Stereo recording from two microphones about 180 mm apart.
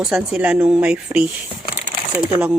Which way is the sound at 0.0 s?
5° right (ahead or behind).